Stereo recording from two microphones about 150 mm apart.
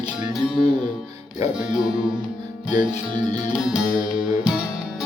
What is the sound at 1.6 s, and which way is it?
Music, 5° right (ahead or behind).